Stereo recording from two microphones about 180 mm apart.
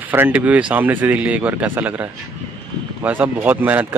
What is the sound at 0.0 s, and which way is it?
Speech, 10° right (ahead or behind).